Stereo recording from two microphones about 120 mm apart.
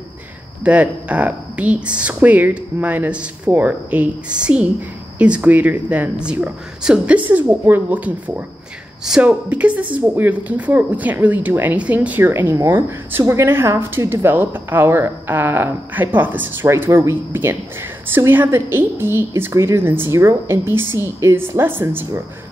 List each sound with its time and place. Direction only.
0.7 s a woman's voice: 10° right (ahead or behind)